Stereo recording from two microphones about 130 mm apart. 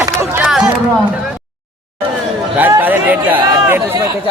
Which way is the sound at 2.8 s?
15° right (ahead or behind).